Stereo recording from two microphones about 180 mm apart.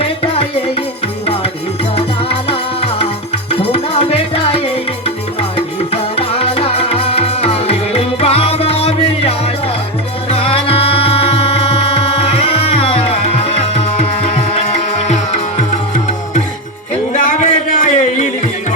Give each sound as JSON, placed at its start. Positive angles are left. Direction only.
{"t": 0.0, "sound": "music", "side_deg": 35}
{"t": 2.5, "sound": "music", "side_deg": 30}
{"t": 17.1, "sound": "a sound", "side_deg": 40}